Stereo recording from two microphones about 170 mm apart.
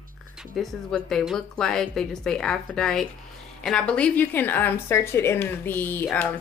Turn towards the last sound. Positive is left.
turn(degrees=10)  # may be behind; listen again after turning